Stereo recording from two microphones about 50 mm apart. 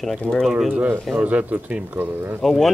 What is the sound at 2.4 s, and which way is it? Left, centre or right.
Speech, centre.